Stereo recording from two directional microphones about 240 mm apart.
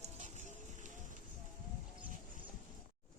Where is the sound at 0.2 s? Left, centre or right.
Right.